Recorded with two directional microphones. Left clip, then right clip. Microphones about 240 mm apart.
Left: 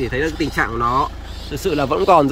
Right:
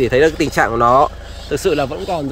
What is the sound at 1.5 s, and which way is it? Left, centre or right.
Speech, centre.